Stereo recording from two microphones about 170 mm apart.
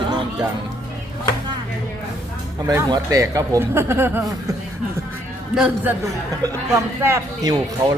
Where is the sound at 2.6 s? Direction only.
20° right (ahead or behind).